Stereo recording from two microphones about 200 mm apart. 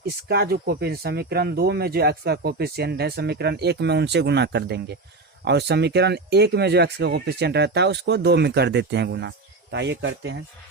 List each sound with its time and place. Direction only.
0.0 s speech: 50° right (ahead or behind)